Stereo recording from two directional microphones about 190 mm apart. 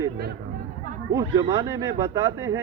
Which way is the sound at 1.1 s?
20° right (ahead or behind).